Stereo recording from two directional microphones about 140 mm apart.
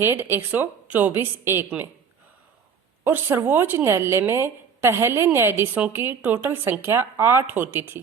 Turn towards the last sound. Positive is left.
turn(degrees=-15)  # may be behind; listen again after turning